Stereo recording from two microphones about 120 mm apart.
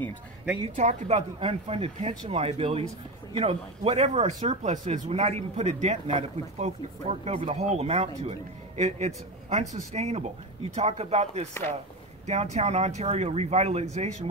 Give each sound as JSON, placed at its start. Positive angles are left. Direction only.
{"t": 0.7, "sound": "speech", "side_deg": -70}
{"t": 13.9, "sound": "speech", "side_deg": -75}